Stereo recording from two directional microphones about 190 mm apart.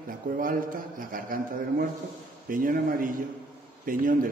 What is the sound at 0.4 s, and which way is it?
A man's voice, 45° right (ahead or behind).